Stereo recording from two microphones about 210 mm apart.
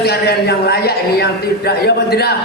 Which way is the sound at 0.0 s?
50° left (ahead or behind).